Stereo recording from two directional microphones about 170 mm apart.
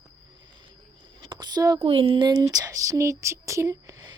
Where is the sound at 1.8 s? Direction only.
35° right (ahead or behind).